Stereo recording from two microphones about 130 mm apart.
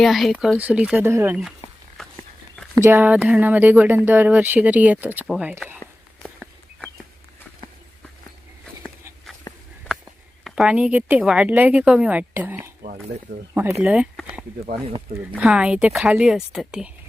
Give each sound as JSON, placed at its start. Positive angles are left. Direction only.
{"t": 0.0, "sound": "speech", "side_deg": 0}
{"t": 0.3, "sound": "speech", "side_deg": -10}
{"t": 2.8, "sound": "speech", "side_deg": -15}
{"t": 10.4, "sound": "speech", "side_deg": -5}
{"t": 15.3, "sound": "speech", "side_deg": -10}